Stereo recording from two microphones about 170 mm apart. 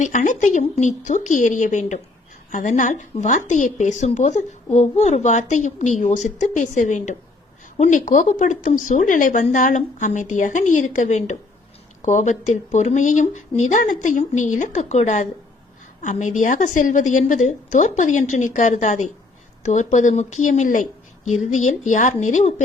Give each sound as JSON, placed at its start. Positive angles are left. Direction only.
{"t": 0.0, "sound": "a woman's voice", "side_deg": 45}